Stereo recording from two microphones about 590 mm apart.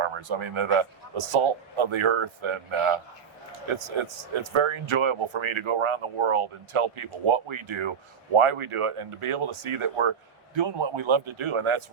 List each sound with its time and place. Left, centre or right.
0.0 s a man's voice: right